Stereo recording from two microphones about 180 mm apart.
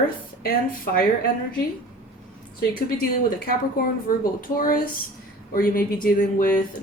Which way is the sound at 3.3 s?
55° left (ahead or behind).